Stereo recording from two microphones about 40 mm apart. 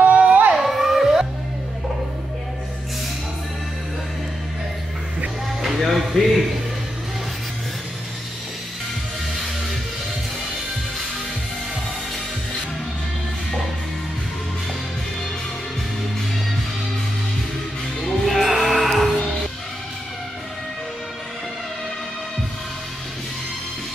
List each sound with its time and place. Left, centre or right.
0.0 s a sound: right
0.6 s children playing: centre
5.8 s music: centre
18.0 s music: centre